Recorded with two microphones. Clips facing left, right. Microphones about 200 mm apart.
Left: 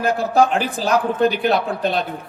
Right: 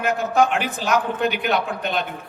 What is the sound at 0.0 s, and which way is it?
A woman's voice, 35° left (ahead or behind).